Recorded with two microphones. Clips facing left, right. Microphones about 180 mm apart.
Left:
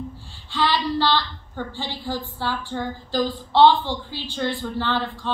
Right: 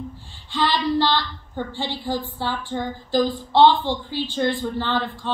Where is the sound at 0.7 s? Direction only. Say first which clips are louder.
Right 1 dB; 15° right (ahead or behind).